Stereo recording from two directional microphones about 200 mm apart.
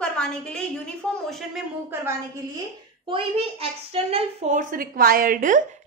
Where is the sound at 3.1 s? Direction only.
30° right (ahead or behind).